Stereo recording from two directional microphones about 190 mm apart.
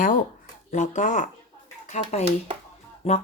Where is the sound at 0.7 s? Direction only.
40° left (ahead or behind).